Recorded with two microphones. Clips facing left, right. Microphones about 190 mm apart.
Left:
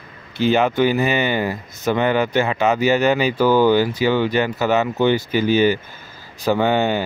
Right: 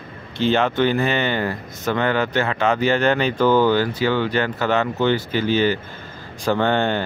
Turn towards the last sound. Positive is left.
turn(degrees=10)  # may be behind; listen again after turning